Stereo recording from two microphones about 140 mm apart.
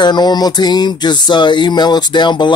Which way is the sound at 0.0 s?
30° left (ahead or behind).